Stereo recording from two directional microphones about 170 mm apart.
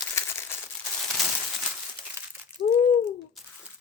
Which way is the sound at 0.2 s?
15° left (ahead or behind).